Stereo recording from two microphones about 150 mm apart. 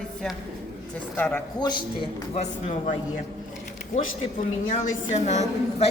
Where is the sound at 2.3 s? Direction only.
50° left (ahead or behind).